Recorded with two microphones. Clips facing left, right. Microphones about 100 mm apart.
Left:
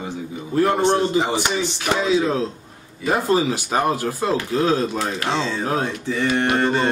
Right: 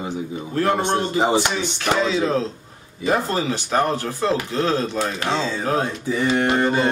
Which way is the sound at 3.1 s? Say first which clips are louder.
Left 2 dB; 5° left (ahead or behind).